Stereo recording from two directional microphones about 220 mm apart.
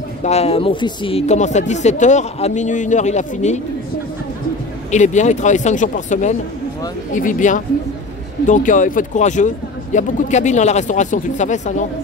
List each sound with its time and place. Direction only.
0.2 s speech: 30° left (ahead or behind)
4.9 s speech: 35° left (ahead or behind)